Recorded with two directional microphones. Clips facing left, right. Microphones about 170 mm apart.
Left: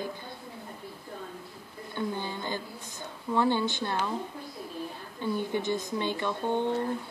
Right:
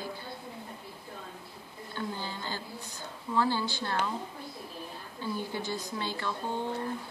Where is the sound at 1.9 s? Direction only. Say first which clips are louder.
Left 4 dB; 20° left (ahead or behind).